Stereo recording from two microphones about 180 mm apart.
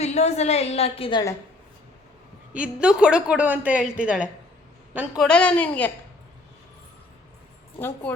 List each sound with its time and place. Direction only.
0.0 s a woman's voice: 35° left (ahead or behind)
2.5 s a woman's voice: 5° right (ahead or behind)
7.8 s a woman's voice: 15° left (ahead or behind)